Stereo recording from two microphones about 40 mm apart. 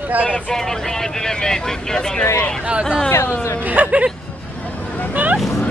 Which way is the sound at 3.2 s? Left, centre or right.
Left.